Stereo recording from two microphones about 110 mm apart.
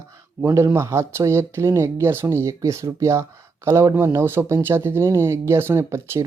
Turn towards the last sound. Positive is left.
turn(degrees=-25)  # may be behind; listen again after turning